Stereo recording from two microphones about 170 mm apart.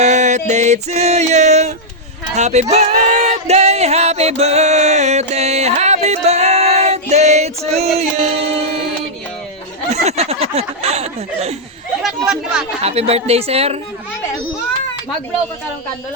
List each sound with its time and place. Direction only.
0.0 s music: 45° right (ahead or behind)
2.3 s speech: 40° right (ahead or behind)
9.9 s speech: 40° right (ahead or behind)
12.0 s speech: centre (ahead or behind)
12.8 s a woman's voice: 35° right (ahead or behind)